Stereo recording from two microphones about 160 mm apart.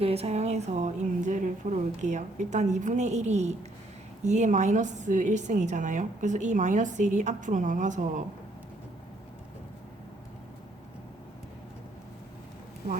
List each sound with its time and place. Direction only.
0.0 s a woman's voice: 40° right (ahead or behind)